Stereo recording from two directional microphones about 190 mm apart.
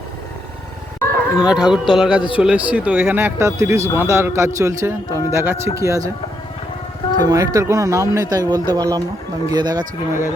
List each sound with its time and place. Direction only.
1.4 s speech: 5° right (ahead or behind)
7.3 s a man's voice: 15° right (ahead or behind)